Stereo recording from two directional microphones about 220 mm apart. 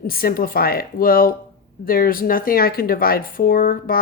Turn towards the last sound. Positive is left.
turn(degrees=40)  # may be behind; listen again after turning